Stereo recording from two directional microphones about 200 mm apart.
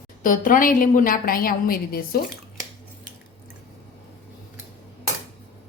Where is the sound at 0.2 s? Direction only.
40° left (ahead or behind).